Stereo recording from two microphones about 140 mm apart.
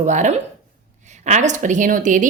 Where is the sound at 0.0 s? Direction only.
60° right (ahead or behind).